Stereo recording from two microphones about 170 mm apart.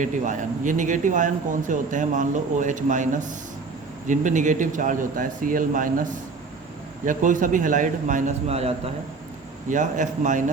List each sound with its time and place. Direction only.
0.0 s speech: 50° right (ahead or behind)